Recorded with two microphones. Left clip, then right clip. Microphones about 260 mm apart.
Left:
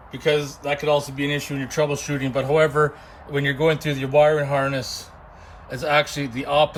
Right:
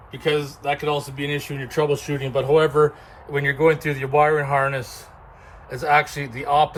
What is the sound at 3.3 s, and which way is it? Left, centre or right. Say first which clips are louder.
Speech: right 2 dB; centre.